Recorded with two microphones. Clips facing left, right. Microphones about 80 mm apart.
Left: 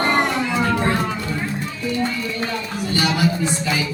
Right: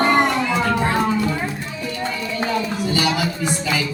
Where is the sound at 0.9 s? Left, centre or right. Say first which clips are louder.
Right 3 dB; centre.